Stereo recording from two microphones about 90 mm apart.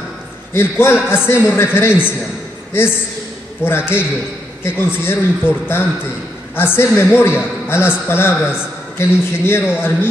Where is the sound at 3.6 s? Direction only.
25° left (ahead or behind).